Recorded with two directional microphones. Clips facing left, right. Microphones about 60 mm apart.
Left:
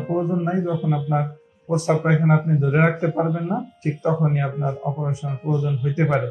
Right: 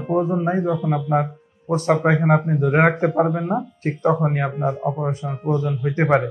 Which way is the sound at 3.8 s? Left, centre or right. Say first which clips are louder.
Right 2 dB; right.